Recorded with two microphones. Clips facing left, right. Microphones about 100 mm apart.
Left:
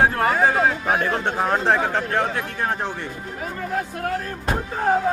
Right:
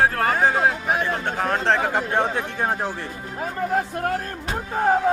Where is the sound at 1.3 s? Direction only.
15° left (ahead or behind).